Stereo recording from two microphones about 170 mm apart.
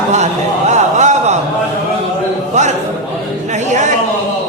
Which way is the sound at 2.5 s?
45° right (ahead or behind).